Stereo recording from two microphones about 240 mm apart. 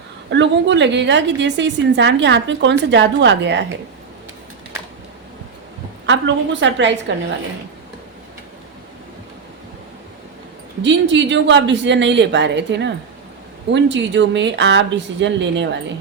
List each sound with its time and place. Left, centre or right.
0.3 s a woman's voice: right
6.1 s a woman's voice: right
11.1 s a woman's voice: right